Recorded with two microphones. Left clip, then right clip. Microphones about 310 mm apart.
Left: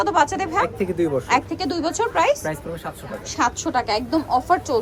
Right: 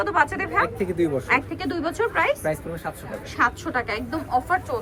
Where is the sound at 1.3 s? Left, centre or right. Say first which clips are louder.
Left 2 dB; centre.